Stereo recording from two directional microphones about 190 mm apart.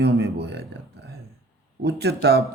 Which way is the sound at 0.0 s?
60° right (ahead or behind).